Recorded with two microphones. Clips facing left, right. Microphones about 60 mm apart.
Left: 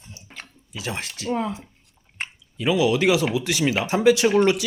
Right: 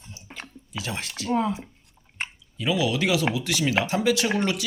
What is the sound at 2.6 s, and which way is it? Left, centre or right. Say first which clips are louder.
Speech: left 4 dB; left.